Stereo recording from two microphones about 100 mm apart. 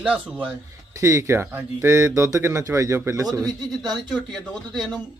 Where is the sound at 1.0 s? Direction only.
30° right (ahead or behind).